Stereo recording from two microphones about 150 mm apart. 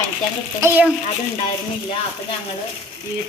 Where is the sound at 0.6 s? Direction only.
10° right (ahead or behind).